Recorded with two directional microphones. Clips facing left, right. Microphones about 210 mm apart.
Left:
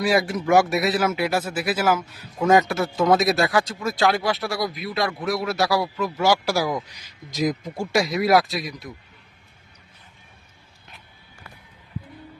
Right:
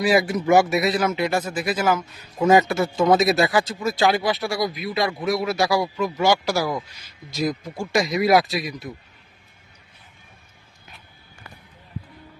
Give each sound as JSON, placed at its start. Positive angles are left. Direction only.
{"t": 0.0, "sound": "speech", "side_deg": 0}